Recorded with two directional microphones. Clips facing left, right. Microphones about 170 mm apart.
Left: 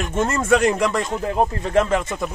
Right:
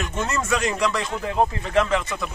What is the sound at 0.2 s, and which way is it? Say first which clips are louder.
Speech: left 7 dB; 50° left (ahead or behind).